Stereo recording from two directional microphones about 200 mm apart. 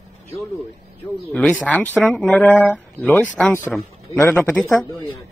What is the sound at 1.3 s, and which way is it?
Speech, 5° left (ahead or behind).